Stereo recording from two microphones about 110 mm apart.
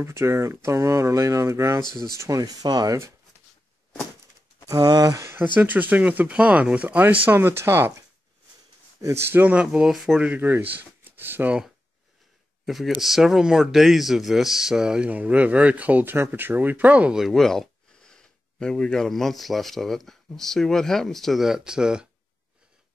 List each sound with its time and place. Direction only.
0.0 s speech: 25° right (ahead or behind)
4.6 s speech: 35° right (ahead or behind)
9.0 s speech: 20° right (ahead or behind)
10.8 s a sound: 20° right (ahead or behind)
12.6 s speech: centre (ahead or behind)